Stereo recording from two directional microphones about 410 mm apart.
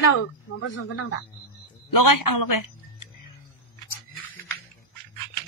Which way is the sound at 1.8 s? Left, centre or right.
Left.